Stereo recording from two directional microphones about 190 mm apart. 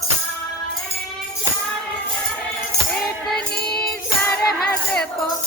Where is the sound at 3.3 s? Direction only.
55° left (ahead or behind).